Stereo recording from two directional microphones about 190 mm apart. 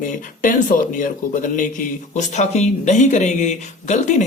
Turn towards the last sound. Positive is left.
turn(degrees=40)  # may be behind; listen again after turning